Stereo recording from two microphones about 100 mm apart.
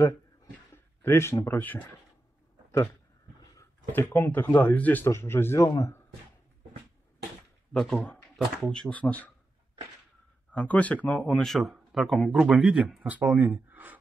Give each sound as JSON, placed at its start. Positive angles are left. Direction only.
{"t": 1.0, "sound": "speech", "side_deg": 25}
{"t": 3.9, "sound": "speech", "side_deg": 25}
{"t": 7.7, "sound": "speech", "side_deg": 5}
{"t": 10.5, "sound": "speech", "side_deg": 15}